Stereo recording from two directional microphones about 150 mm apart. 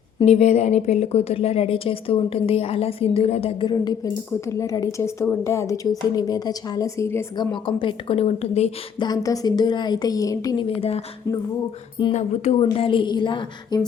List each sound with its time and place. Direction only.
0.3 s a woman's voice: 45° left (ahead or behind); by 7.3 s 20° left (ahead or behind)
7.3 s a woman's voice: 35° left (ahead or behind)
9.0 s speech: 25° left (ahead or behind)
10.8 s a woman's voice: 40° left (ahead or behind)